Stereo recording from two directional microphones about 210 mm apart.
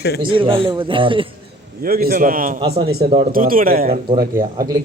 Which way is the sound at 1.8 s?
45° right (ahead or behind).